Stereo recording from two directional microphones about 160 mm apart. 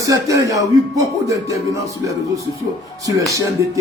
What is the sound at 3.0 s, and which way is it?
Speech, 20° right (ahead or behind).